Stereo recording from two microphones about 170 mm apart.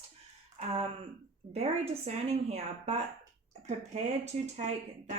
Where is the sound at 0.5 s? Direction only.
40° right (ahead or behind).